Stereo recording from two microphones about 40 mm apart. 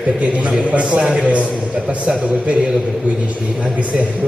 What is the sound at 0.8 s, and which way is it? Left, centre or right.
Speech, centre.